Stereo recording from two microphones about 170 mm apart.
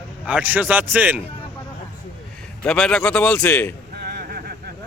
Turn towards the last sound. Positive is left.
turn(degrees=-65)  # may be behind; listen again after turning